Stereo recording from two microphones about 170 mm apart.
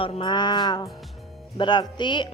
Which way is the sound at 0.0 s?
30° left (ahead or behind).